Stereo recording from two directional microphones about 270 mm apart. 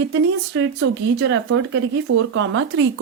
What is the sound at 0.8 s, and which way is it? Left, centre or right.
Speech, right.